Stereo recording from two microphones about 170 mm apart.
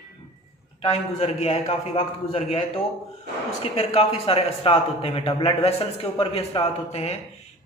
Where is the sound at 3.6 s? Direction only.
35° left (ahead or behind).